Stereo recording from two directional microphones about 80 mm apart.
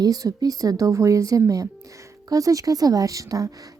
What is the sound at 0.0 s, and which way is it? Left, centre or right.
A woman's voice, right.